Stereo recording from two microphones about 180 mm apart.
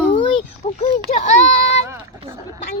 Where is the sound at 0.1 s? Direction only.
30° left (ahead or behind).